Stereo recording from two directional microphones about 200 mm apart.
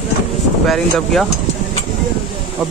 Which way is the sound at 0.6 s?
Centre (ahead or behind).